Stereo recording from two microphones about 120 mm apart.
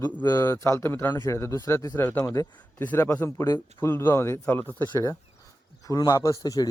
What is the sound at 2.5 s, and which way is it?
Speech, 15° left (ahead or behind).